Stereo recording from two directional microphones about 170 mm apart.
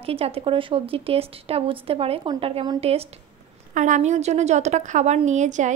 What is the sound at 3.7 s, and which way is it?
A woman's voice, 45° right (ahead or behind).